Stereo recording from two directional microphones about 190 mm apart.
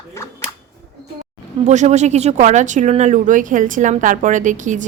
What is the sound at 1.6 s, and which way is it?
Speech, 40° right (ahead or behind).